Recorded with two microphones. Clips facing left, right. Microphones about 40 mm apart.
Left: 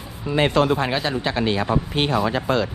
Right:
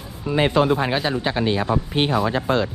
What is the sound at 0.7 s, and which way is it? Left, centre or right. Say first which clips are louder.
Speech: right 1 dB; centre.